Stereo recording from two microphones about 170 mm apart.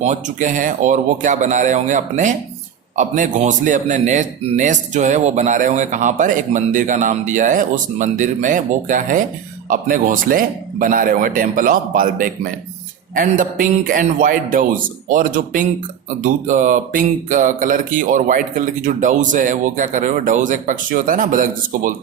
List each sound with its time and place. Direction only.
0.0 s speech: 45° right (ahead or behind)